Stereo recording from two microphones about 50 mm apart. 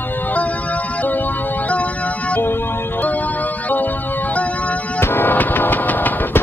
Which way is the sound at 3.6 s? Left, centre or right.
Left.